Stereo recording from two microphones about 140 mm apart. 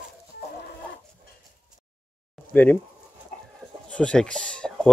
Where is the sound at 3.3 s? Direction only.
70° left (ahead or behind).